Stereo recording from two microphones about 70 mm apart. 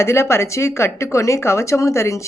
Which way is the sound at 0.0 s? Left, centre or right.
Left.